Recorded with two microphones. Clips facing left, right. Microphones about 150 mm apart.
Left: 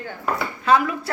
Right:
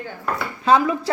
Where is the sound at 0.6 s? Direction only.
25° right (ahead or behind).